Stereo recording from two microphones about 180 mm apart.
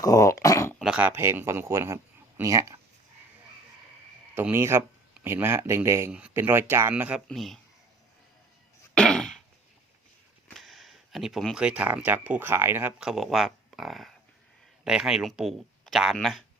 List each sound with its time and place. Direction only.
0.0 s dog: 20° left (ahead or behind)
0.8 s speech: 5° right (ahead or behind)
4.4 s speech: 10° right (ahead or behind)
9.0 s cough: 5° left (ahead or behind)
10.5 s speech: centre (ahead or behind)